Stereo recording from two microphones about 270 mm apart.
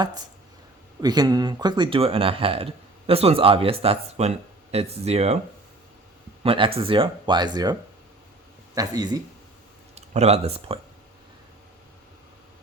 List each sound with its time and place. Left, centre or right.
1.0 s speech: centre
6.4 s speech: right
9.9 s speech: right